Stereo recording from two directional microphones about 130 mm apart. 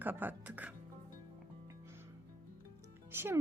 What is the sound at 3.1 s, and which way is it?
Speech, 15° right (ahead or behind).